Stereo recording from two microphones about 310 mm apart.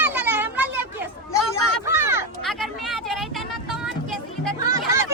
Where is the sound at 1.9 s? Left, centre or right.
Centre.